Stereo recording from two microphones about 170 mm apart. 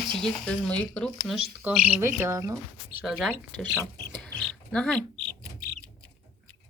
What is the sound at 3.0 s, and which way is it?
Speech, centre (ahead or behind).